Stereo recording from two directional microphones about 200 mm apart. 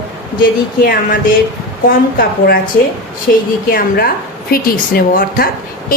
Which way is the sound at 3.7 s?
45° left (ahead or behind).